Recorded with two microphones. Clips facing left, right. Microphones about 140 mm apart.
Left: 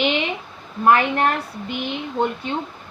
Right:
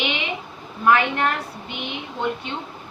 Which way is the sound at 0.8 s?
40° left (ahead or behind).